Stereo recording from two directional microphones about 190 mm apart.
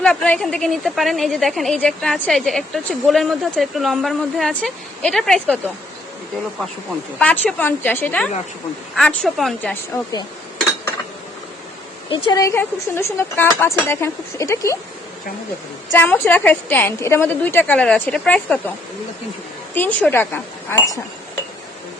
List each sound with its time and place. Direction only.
0.0 s a woman's voice: 5° left (ahead or behind)
7.2 s a woman's voice: 10° left (ahead or behind)
12.1 s a woman's voice: 20° left (ahead or behind)
15.9 s a woman's voice: 10° left (ahead or behind)
19.7 s a woman's voice: 10° left (ahead or behind)